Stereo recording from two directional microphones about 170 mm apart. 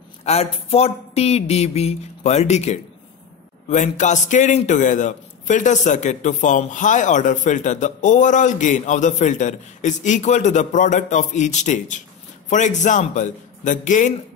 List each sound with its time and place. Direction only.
0.2 s a man's voice: 35° left (ahead or behind)